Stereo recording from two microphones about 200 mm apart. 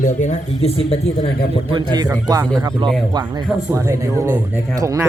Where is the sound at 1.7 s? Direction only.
20° right (ahead or behind).